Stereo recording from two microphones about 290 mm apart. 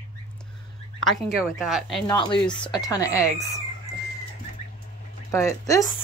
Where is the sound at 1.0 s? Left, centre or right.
Centre.